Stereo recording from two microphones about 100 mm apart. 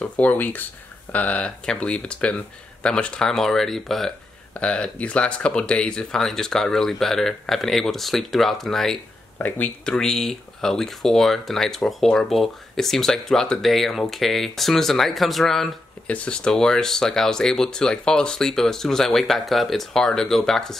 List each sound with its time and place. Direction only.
0.0 s speech: 15° left (ahead or behind)